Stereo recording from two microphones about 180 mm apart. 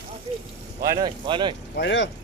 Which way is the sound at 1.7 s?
90° left.